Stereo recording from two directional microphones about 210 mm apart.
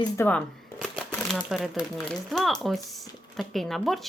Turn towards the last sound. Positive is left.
turn(degrees=0)  # may be behind; listen again after turning